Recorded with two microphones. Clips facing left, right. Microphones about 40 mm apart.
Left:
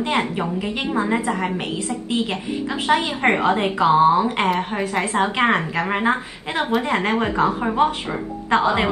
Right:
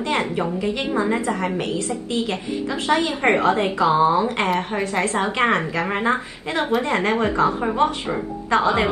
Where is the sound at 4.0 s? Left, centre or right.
Left.